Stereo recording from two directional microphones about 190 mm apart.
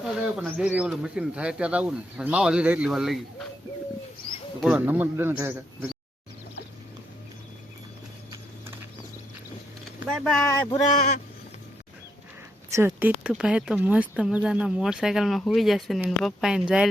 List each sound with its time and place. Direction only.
0.0 s speech: 5° right (ahead or behind)
4.6 s speech: 10° right (ahead or behind)
10.7 s speech: 40° left (ahead or behind)
12.7 s speech: 10° right (ahead or behind)